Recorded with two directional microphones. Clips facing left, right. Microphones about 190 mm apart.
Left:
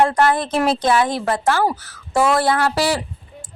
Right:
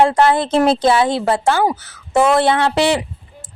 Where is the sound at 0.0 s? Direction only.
25° right (ahead or behind).